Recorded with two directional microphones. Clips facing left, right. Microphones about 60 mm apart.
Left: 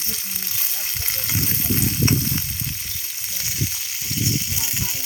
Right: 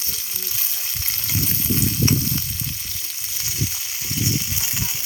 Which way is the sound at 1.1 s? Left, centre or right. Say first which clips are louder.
Even; left.